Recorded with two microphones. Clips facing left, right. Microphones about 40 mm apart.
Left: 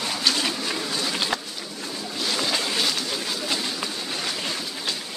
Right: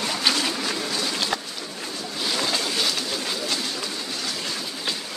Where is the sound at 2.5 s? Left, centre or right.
Centre.